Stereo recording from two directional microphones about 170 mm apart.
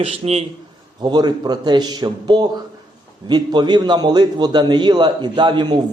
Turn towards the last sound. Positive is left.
turn(degrees=-25)  # may be behind; listen again after turning